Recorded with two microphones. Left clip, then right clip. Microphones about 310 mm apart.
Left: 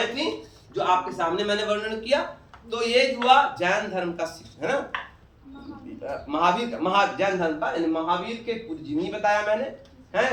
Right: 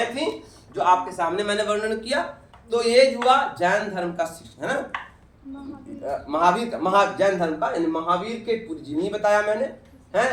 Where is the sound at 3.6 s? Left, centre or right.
Centre.